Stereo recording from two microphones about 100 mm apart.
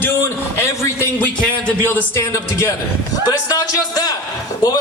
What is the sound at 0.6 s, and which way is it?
A man's voice, 25° left (ahead or behind).